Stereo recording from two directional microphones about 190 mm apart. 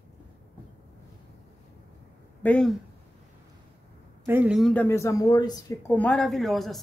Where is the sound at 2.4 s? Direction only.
5° left (ahead or behind).